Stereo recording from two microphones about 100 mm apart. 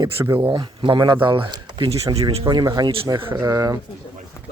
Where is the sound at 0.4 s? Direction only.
55° right (ahead or behind).